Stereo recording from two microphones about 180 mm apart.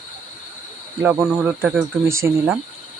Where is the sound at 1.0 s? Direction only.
10° right (ahead or behind).